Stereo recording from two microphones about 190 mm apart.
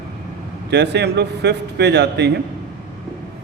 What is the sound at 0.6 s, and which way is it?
A man's voice, 65° right (ahead or behind).